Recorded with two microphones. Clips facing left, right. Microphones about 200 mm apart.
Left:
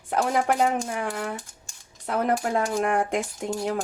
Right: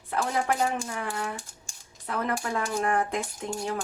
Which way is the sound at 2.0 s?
45° left (ahead or behind).